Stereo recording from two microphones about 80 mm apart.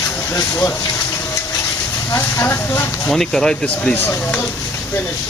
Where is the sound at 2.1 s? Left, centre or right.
Left.